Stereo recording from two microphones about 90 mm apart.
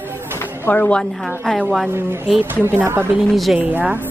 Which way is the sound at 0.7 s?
15° left (ahead or behind).